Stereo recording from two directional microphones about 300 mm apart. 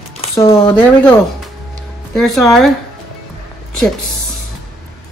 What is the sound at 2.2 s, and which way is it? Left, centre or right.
Speech, centre.